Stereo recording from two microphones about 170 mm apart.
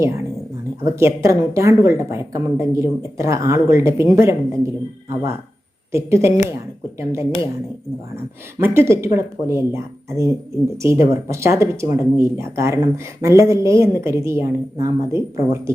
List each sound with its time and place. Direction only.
0.8 s speech: 15° right (ahead or behind)